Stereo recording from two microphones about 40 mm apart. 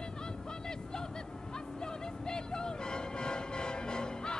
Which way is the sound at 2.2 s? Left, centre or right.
Centre.